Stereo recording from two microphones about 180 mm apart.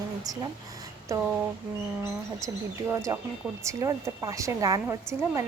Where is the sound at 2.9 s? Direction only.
15° right (ahead or behind).